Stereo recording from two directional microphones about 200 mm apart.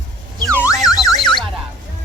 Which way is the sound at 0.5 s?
15° left (ahead or behind).